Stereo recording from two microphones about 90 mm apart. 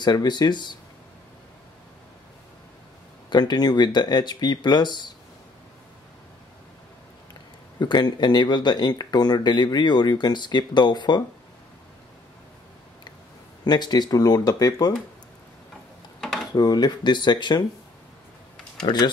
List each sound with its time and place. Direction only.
0.0 s speech: 50° left (ahead or behind)
3.3 s speech: 50° left (ahead or behind)
7.8 s speech: 55° left (ahead or behind)
13.7 s speech: 50° left (ahead or behind)
16.5 s speech: 50° left (ahead or behind)
18.9 s speech: 65° left (ahead or behind)